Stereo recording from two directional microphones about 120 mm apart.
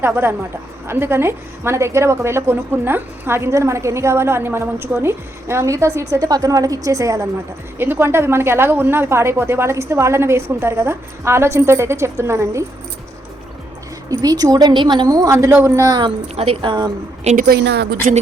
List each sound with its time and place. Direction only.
0.0 s a woman's voice: 20° right (ahead or behind)
14.1 s a woman's voice: 30° right (ahead or behind)
16.3 s a woman's voice: 60° right (ahead or behind)
16.6 s a woman's voice: 40° right (ahead or behind)
17.3 s a woman's voice: 75° right (ahead or behind)
18.0 s speech: 90° right